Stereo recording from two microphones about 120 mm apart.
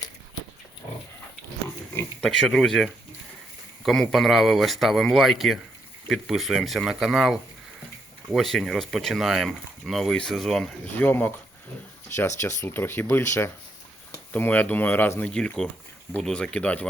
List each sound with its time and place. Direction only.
2.2 s speech: centre (ahead or behind)
4.1 s speech: centre (ahead or behind)
10.9 s speech: 15° left (ahead or behind)
15.3 s speech: 5° left (ahead or behind)